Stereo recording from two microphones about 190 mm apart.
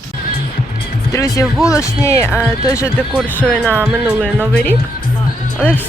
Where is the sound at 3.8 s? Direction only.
5° right (ahead or behind).